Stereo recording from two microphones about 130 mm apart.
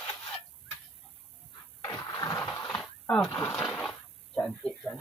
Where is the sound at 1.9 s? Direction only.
25° left (ahead or behind).